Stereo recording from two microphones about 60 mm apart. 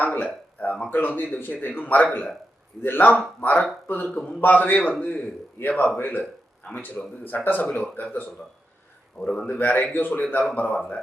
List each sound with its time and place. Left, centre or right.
0.0 s a sound: left
0.9 s a man's voice: left
7.3 s speech: left
9.1 s a man's voice: centre
9.5 s a man's voice: left